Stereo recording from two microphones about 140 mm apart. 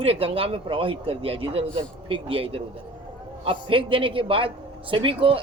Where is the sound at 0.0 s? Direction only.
45° right (ahead or behind).